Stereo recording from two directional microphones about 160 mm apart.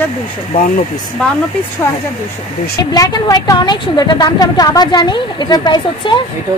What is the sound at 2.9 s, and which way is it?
A woman's voice, 20° left (ahead or behind).